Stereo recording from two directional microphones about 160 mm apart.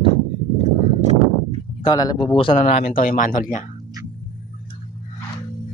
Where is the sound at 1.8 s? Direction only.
25° left (ahead or behind); by 2.9 s 40° left (ahead or behind).